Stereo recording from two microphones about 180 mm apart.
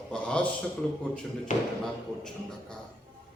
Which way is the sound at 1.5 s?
45° left (ahead or behind).